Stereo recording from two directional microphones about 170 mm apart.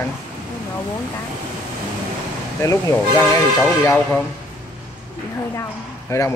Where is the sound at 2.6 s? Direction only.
15° left (ahead or behind).